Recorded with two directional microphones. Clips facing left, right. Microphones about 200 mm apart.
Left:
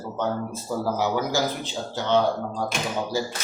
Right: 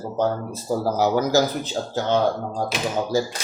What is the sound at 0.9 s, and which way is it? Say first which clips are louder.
Speech: right 6 dB; 40° right (ahead or behind).